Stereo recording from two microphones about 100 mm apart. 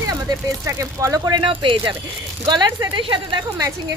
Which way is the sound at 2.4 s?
45° right (ahead or behind).